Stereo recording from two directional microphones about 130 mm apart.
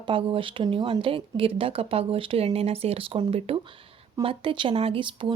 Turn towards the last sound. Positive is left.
turn(degrees=-40)  # may be behind; listen again after turning